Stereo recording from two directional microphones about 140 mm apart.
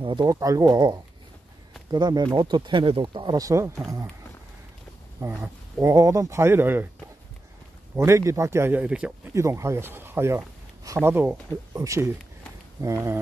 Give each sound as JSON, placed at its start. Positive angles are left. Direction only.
{"t": 0.0, "sound": "speech", "side_deg": -30}
{"t": 5.4, "sound": "speech", "side_deg": -20}
{"t": 7.9, "sound": "a man's voice", "side_deg": -20}
{"t": 9.3, "sound": "a man's voice", "side_deg": -20}